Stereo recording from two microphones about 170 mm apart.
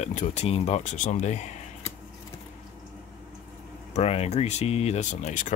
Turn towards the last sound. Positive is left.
turn(degrees=45)  # may be behind; listen again after turning